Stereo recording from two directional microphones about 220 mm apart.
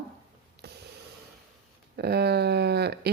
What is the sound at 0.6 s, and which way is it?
Snort, 50° right (ahead or behind).